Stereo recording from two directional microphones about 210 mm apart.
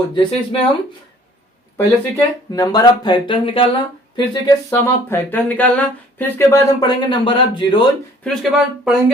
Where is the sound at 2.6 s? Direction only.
20° left (ahead or behind).